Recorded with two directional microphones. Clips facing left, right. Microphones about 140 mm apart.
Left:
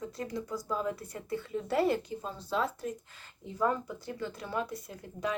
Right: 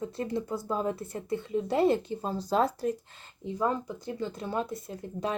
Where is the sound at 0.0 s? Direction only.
25° right (ahead or behind).